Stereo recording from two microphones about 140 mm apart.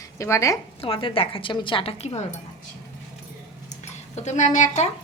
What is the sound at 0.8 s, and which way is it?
A woman's voice, 40° left (ahead or behind).